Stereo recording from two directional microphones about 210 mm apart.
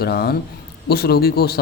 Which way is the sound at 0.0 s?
50° left (ahead or behind).